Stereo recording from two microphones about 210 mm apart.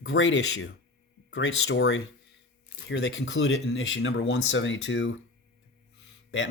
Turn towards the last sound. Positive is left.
turn(degrees=60)  # may be behind; listen again after turning